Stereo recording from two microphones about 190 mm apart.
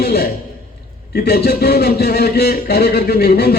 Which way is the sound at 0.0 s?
55° left (ahead or behind).